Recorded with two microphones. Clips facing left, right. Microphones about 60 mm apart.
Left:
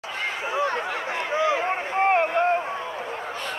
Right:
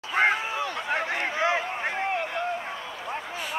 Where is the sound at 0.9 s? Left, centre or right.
Right.